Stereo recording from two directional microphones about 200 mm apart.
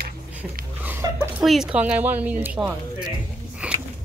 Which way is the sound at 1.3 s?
Centre (ahead or behind).